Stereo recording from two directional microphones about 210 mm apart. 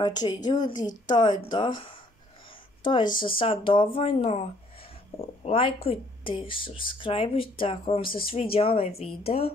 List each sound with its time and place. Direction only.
0.0 s speech: 20° left (ahead or behind)